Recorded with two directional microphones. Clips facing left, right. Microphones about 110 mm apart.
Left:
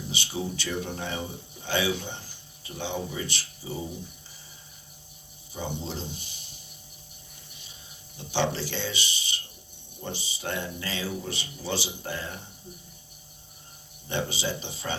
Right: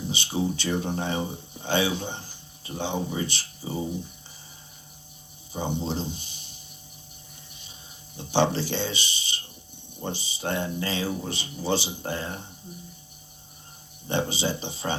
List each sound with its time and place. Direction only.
0.1 s speech: 25° right (ahead or behind)
5.5 s speech: 25° right (ahead or behind)
8.1 s speech: 25° right (ahead or behind)
14.1 s speech: 25° right (ahead or behind)